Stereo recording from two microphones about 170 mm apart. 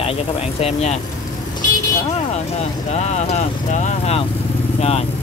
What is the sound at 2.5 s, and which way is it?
Speech, 40° left (ahead or behind).